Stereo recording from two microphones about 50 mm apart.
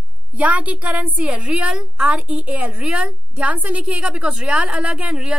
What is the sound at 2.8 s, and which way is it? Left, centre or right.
A woman's voice, right.